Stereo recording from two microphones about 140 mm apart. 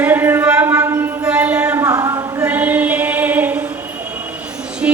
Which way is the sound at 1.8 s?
25° right (ahead or behind).